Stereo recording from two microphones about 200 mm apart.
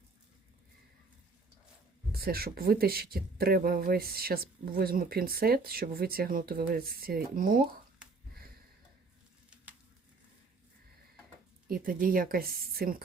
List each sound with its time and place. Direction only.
2.1 s speech: 50° right (ahead or behind)
11.7 s speech: 45° right (ahead or behind)